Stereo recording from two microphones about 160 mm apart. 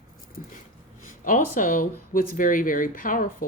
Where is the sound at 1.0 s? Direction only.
55° left (ahead or behind).